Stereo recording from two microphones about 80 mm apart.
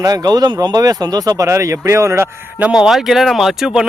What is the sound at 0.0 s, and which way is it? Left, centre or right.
Speech, right.